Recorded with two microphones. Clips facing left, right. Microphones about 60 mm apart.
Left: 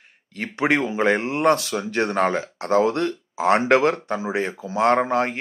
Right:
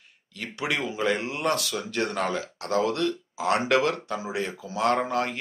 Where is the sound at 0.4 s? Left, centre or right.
Left.